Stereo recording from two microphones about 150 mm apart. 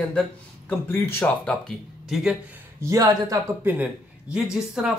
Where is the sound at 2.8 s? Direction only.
25° right (ahead or behind).